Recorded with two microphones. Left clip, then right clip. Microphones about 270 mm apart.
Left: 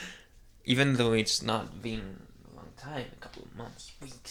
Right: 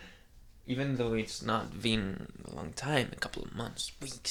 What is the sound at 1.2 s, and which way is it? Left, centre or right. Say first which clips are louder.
Speech: left 4 dB; centre.